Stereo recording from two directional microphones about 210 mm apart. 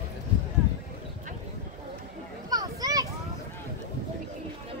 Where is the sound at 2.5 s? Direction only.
20° right (ahead or behind).